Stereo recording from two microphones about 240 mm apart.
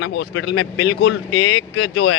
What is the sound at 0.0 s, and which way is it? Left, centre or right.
A man's voice, left.